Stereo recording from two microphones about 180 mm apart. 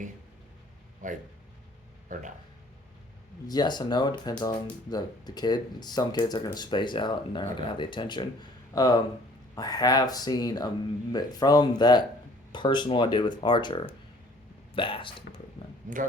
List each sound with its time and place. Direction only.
1.0 s speech: 45° right (ahead or behind)
3.4 s speech: 25° left (ahead or behind)
15.9 s speech: 45° right (ahead or behind)